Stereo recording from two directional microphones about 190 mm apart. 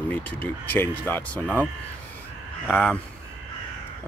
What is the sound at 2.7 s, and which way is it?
Speech, 5° left (ahead or behind).